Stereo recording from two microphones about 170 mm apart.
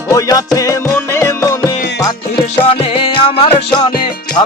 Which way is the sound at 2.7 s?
35° left (ahead or behind).